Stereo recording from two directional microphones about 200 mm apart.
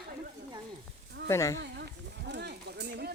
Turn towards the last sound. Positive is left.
turn(degrees=-55)  # may be behind; listen again after turning